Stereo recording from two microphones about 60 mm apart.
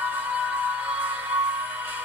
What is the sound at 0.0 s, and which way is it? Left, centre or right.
Music, right.